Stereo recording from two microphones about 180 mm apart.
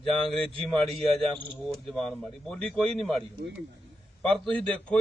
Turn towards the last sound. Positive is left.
turn(degrees=5)  # may be behind; listen again after turning